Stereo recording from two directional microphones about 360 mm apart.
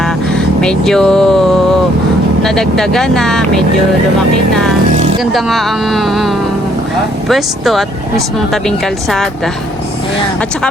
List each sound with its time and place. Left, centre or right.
0.0 s speech: centre
5.2 s speech: centre